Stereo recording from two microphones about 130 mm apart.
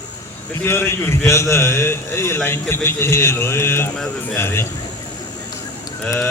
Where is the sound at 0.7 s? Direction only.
20° left (ahead or behind).